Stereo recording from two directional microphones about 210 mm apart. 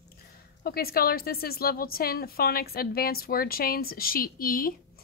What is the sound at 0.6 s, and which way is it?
A woman's voice, 45° left (ahead or behind).